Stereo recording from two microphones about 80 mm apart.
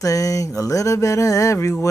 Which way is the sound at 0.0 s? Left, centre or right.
Left.